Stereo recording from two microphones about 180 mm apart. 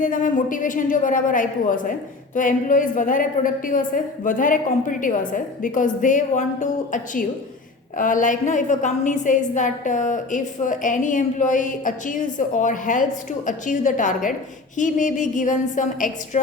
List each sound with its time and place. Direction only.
0.0 s a woman's voice: 45° left (ahead or behind)